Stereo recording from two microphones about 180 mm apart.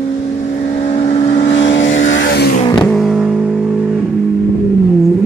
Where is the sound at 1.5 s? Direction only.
90° left; by 2.5 s 70° left (ahead or behind).